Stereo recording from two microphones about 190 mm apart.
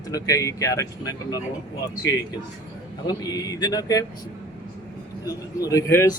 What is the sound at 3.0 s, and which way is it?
Speech, 20° left (ahead or behind).